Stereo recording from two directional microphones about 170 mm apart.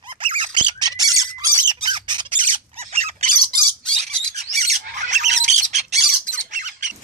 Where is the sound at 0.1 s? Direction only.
30° right (ahead or behind).